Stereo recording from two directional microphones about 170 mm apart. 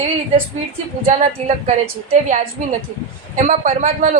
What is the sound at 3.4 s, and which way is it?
Speech, 45° right (ahead or behind).